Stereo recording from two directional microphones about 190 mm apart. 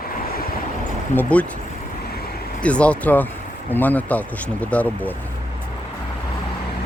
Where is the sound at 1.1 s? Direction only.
10° left (ahead or behind).